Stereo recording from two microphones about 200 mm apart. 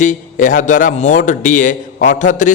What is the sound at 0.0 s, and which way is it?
A man's voice, 40° left (ahead or behind).